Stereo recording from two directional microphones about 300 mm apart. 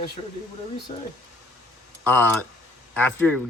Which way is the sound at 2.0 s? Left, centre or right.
Centre.